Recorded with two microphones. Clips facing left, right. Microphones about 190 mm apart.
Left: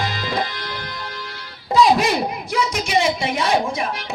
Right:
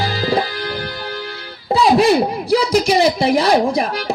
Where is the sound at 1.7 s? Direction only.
30° right (ahead or behind).